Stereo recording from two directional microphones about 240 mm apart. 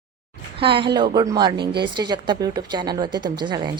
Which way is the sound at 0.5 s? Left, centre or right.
Right.